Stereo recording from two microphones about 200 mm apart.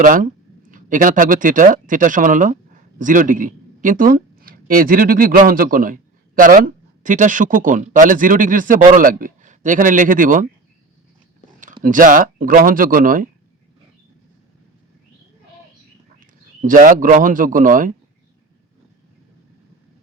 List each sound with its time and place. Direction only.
0.0 s speech: 40° right (ahead or behind)
11.8 s speech: 40° right (ahead or behind)
16.2 s a man's voice: 40° right (ahead or behind)